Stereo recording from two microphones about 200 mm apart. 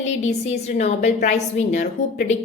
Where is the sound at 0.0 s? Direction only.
35° left (ahead or behind).